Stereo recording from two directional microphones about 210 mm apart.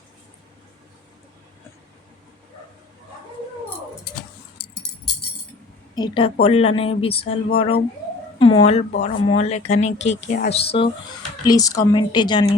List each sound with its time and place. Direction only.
5.9 s a woman's voice: 20° left (ahead or behind)
10.0 s speech: 55° left (ahead or behind)
10.5 s speech: 25° left (ahead or behind)
11.4 s speech: 15° left (ahead or behind)